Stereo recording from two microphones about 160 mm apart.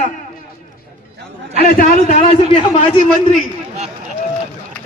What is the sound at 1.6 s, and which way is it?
Speech, 65° left (ahead or behind).